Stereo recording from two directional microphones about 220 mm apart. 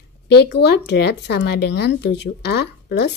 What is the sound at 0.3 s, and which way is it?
A woman's voice, 50° left (ahead or behind).